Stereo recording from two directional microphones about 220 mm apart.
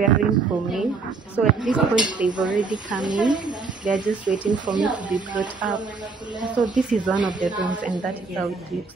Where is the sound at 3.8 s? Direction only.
35° right (ahead or behind).